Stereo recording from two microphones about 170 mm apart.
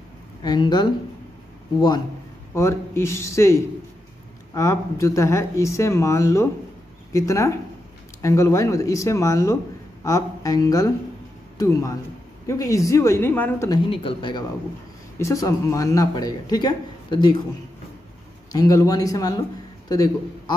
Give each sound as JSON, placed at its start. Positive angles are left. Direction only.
{"t": 0.4, "sound": "speech", "side_deg": 25}
{"t": 2.5, "sound": "speech", "side_deg": 15}
{"t": 13.7, "sound": "speech", "side_deg": 30}
{"t": 15.1, "sound": "speech", "side_deg": 20}
{"t": 18.5, "sound": "speech", "side_deg": 20}